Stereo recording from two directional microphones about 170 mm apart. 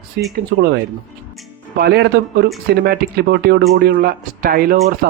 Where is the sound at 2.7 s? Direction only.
65° right (ahead or behind).